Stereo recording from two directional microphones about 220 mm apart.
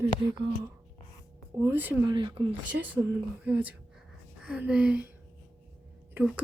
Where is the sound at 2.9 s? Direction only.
10° right (ahead or behind).